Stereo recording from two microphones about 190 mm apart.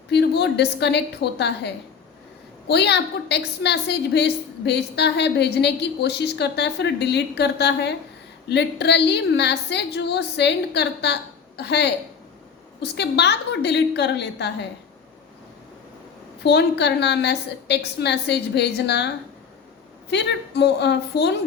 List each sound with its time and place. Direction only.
0.1 s a woman's voice: 60° left (ahead or behind)
16.4 s a woman's voice: 60° left (ahead or behind)